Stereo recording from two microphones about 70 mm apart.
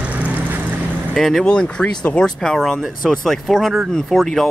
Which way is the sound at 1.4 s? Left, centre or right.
Centre.